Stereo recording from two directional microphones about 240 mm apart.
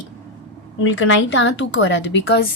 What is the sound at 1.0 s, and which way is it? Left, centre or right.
A woman's voice, left.